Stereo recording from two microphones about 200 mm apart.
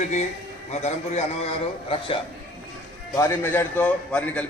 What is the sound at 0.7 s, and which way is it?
Speech, 35° left (ahead or behind).